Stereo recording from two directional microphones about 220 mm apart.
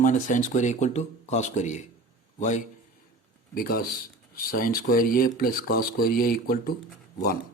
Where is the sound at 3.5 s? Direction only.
45° left (ahead or behind).